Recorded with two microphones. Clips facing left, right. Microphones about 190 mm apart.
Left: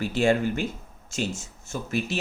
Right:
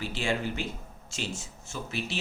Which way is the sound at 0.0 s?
45° left (ahead or behind).